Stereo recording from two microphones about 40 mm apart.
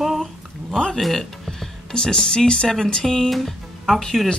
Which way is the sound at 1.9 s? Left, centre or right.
Centre.